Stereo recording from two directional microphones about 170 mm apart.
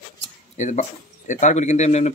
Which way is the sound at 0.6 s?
45° left (ahead or behind).